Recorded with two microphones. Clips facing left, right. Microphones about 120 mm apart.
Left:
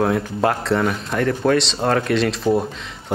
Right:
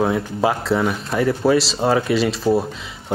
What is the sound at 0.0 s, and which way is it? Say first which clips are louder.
Speech: even; 5° right (ahead or behind).